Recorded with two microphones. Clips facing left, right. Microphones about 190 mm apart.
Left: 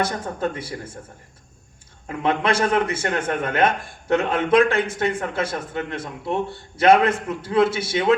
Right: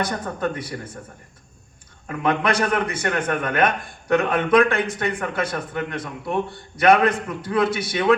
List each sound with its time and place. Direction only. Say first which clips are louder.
0.0 s a man's voice: left 1 dB; 25° left (ahead or behind)
2.0 s a man's voice: even; 25° left (ahead or behind)